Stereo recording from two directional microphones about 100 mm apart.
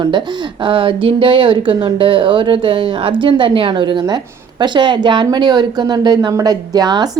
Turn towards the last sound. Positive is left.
turn(degrees=-45)  # may be behind; listen again after turning